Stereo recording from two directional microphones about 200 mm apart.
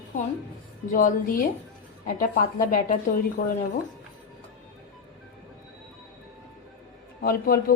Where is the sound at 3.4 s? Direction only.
60° left (ahead or behind).